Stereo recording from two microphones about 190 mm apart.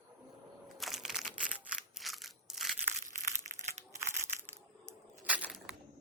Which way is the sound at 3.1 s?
45° right (ahead or behind).